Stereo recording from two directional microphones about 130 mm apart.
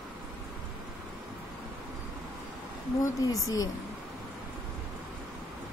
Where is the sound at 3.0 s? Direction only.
25° left (ahead or behind).